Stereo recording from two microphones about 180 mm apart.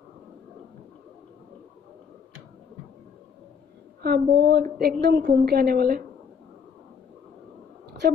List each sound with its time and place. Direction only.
4.0 s a woman's voice: 60° right (ahead or behind)